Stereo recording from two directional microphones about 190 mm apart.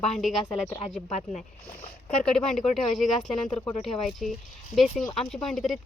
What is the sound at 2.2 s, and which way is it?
Speech, 5° left (ahead or behind).